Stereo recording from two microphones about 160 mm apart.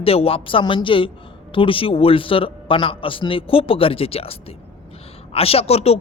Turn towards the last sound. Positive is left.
turn(degrees=40)  # may be behind; listen again after turning